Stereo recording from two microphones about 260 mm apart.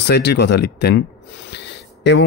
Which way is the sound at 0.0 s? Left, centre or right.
Left.